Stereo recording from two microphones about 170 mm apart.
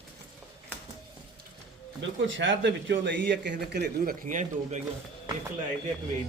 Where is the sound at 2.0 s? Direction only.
90° right; by 4.8 s 45° right (ahead or behind).